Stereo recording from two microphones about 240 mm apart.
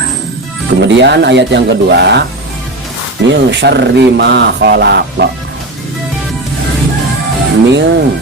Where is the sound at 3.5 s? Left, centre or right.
Right.